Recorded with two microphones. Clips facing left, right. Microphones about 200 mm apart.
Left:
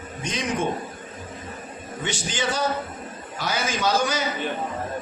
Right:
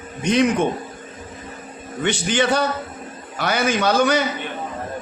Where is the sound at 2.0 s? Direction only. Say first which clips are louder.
Right 8 dB; 65° right (ahead or behind).